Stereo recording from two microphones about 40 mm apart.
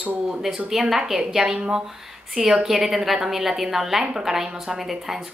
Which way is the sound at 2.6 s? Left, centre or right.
Centre.